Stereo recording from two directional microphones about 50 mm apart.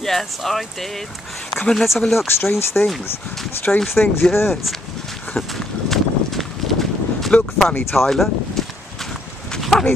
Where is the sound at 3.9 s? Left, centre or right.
Left.